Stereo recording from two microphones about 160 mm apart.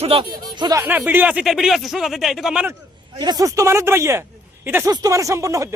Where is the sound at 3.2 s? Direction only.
25° right (ahead or behind).